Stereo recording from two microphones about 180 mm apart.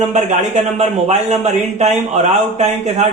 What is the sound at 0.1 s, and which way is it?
Speech, 35° right (ahead or behind).